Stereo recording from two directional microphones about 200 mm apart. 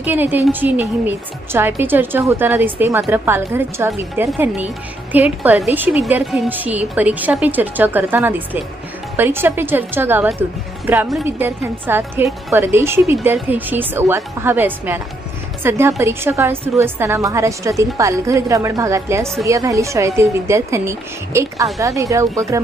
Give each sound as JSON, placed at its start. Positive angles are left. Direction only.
{"t": 0.0, "sound": "a woman's voice", "side_deg": -10}